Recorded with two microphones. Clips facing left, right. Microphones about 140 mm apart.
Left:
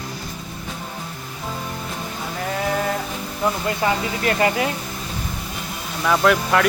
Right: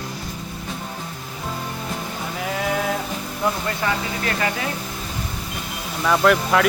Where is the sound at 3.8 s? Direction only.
25° left (ahead or behind).